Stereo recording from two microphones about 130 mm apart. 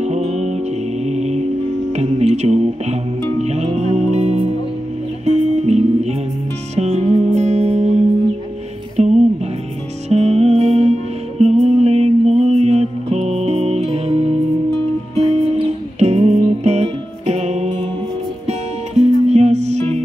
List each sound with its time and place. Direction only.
0.0 s music: 60° right (ahead or behind)